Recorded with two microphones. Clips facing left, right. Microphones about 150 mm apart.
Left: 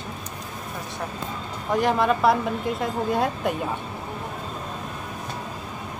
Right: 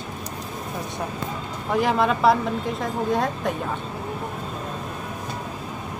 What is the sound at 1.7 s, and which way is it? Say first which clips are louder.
A woman's voice: even; centre (ahead or behind).